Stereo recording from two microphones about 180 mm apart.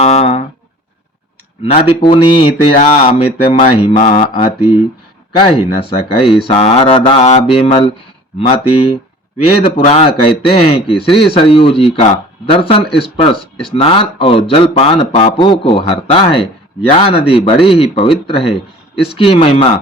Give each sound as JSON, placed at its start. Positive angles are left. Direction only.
{"t": 0.0, "sound": "a sound", "side_deg": 35}
{"t": 1.7, "sound": "speech", "side_deg": 30}
{"t": 3.9, "sound": "mantra", "side_deg": 50}
{"t": 4.2, "sound": "speech", "side_deg": 30}
{"t": 9.6, "sound": "speech", "side_deg": 30}